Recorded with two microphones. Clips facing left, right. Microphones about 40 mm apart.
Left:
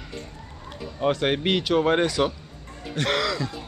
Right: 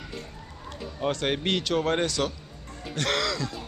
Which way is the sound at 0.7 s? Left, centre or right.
Centre.